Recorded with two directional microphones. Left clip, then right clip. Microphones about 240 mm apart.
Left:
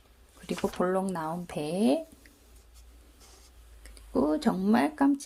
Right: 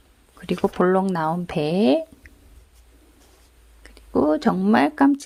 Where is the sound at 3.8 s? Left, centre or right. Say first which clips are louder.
Right 8 dB; right.